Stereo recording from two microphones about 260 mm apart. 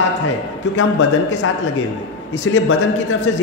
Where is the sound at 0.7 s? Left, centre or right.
Left.